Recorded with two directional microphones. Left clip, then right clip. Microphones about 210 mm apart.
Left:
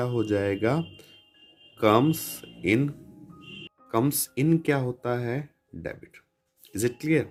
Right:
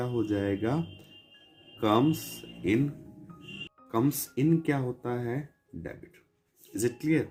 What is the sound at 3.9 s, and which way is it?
Speech, 50° left (ahead or behind).